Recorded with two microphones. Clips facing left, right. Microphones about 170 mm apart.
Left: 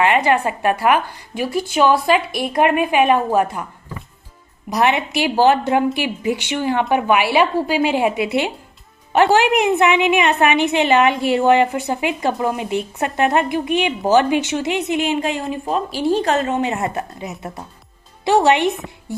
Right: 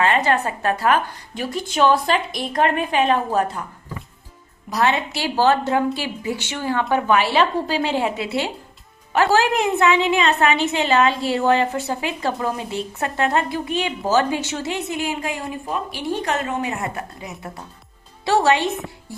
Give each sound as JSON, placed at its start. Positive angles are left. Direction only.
{"t": 0.0, "sound": "a woman's voice", "side_deg": 15}
{"t": 4.7, "sound": "a woman's voice", "side_deg": 15}